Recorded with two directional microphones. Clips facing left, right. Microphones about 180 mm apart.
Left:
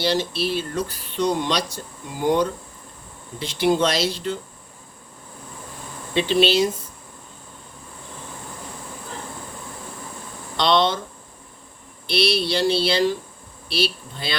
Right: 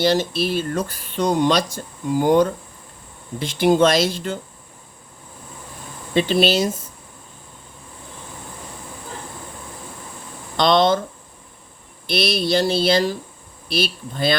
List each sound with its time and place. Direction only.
0.0 s speech: 50° right (ahead or behind)
6.1 s speech: 45° right (ahead or behind)
10.6 s speech: 45° right (ahead or behind)
12.0 s speech: 45° right (ahead or behind)